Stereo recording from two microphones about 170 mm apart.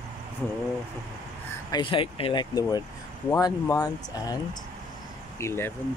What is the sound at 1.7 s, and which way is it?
Speech, 30° left (ahead or behind).